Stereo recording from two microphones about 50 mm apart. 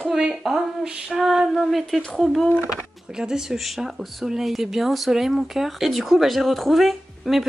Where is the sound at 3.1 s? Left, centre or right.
Centre.